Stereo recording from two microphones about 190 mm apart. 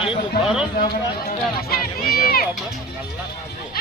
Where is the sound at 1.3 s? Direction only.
50° left (ahead or behind).